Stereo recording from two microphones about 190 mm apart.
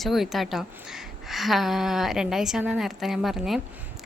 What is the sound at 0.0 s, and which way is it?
A woman's voice, centre (ahead or behind).